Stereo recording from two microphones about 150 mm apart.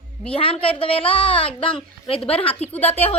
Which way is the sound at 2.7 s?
10° left (ahead or behind).